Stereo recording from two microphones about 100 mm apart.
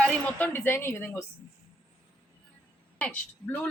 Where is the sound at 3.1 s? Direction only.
15° left (ahead or behind).